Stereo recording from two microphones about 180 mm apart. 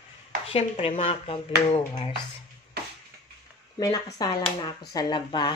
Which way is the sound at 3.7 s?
20° left (ahead or behind).